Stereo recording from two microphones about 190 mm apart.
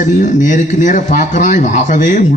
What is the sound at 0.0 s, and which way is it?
A man's voice, 40° left (ahead or behind).